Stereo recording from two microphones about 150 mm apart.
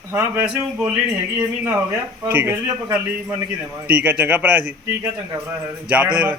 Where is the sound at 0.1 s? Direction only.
15° right (ahead or behind).